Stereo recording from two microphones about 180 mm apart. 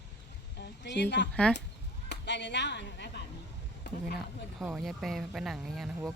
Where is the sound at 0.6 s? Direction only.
70° left (ahead or behind).